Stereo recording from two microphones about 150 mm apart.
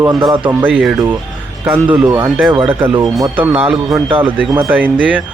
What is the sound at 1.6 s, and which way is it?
Speech, 10° right (ahead or behind).